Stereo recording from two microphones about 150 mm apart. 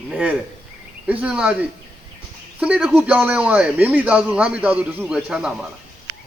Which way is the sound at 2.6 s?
10° right (ahead or behind).